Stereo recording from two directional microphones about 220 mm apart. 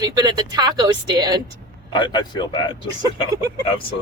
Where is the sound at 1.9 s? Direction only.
20° left (ahead or behind).